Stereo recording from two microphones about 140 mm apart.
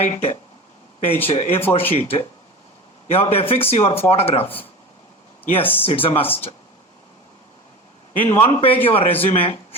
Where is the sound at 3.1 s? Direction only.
45° left (ahead or behind).